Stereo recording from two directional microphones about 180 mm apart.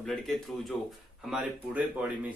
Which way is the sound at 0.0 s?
Centre (ahead or behind).